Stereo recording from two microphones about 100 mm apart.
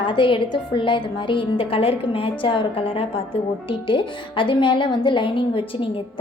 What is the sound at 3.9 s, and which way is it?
A woman's voice, 55° left (ahead or behind).